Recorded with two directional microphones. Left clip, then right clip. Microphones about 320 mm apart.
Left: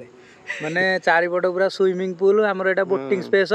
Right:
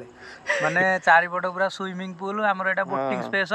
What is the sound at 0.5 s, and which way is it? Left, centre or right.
Speech, centre.